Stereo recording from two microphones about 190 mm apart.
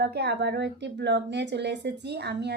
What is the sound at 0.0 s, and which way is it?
Speech, 60° right (ahead or behind).